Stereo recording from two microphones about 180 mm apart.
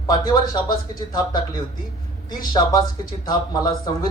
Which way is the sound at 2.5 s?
25° left (ahead or behind).